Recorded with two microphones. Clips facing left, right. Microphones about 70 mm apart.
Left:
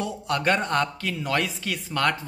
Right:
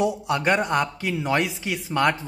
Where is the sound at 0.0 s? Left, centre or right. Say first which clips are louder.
Right 3 dB; centre.